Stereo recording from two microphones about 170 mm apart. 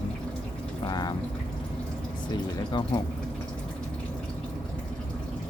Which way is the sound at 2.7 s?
25° left (ahead or behind).